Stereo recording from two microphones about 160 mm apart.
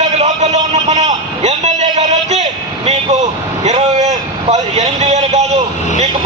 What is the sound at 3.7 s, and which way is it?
Vehicle, 45° right (ahead or behind).